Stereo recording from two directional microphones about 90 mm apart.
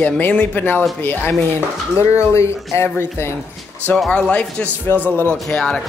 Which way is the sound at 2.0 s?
30° left (ahead or behind).